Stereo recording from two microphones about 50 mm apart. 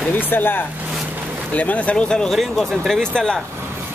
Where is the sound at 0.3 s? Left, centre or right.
Left.